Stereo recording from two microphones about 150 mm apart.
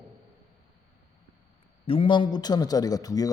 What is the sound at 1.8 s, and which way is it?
Speech, 35° left (ahead or behind).